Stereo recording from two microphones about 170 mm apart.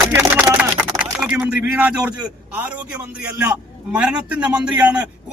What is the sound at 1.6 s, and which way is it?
Speech, 5° right (ahead or behind).